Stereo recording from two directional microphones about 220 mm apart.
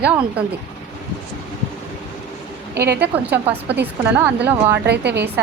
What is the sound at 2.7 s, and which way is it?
Speech, 45° right (ahead or behind).